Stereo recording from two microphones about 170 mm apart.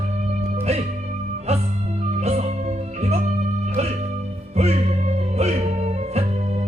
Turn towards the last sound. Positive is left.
turn(degrees=-40)  # may be behind; listen again after turning